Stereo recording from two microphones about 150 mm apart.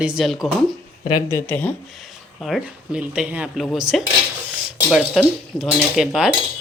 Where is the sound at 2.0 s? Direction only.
Centre (ahead or behind).